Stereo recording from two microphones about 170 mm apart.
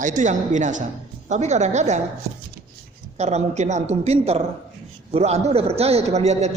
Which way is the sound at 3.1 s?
40° right (ahead or behind).